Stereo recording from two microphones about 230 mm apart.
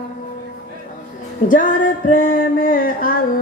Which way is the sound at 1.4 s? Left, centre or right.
Left.